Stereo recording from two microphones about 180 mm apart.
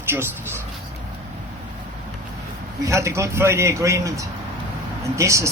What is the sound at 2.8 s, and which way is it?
Speech, 15° right (ahead or behind).